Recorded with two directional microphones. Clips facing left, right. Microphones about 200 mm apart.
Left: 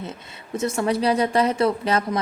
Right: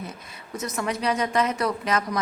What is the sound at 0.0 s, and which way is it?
Speech, 25° left (ahead or behind).